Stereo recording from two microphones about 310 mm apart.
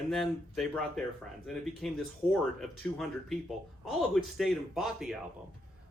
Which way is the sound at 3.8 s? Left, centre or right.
Centre.